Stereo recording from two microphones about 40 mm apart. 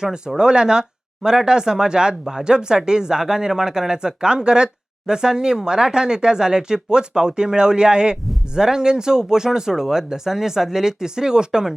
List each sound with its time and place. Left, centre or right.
0.3 s speech: centre